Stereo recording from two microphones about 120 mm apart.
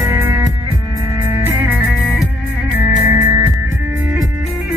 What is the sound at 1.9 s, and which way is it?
Music, 5° right (ahead or behind).